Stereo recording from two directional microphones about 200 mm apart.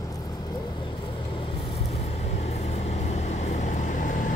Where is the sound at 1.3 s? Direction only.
25° left (ahead or behind).